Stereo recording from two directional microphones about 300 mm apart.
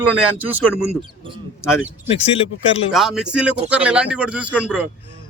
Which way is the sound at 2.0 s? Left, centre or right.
Centre.